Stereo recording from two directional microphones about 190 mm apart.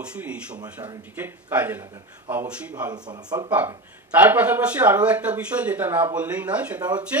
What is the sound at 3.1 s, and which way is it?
Speech, 20° right (ahead or behind).